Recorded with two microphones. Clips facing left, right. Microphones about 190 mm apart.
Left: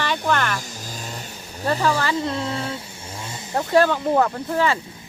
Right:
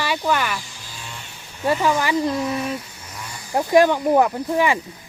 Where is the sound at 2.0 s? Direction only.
15° right (ahead or behind).